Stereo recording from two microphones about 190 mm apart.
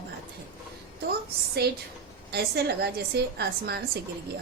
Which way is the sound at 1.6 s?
55° right (ahead or behind).